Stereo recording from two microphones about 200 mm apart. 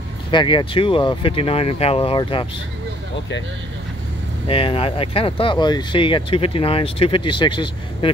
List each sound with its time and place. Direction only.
0.3 s speech: 25° left (ahead or behind)
4.5 s speech: 25° left (ahead or behind)